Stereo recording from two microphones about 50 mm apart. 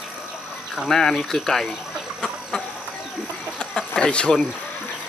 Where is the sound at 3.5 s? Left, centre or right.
Centre.